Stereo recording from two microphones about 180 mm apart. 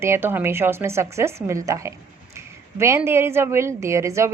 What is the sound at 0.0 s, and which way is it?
A woman's voice, 15° right (ahead or behind).